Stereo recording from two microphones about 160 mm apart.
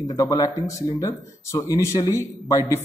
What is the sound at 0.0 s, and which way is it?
Speech, 20° left (ahead or behind).